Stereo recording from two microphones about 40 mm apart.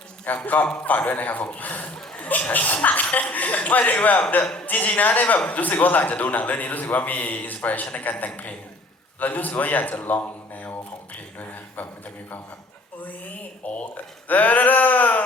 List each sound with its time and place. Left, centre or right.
0.3 s a man's voice: left
11.3 s a sound: left
13.0 s a man's voice: left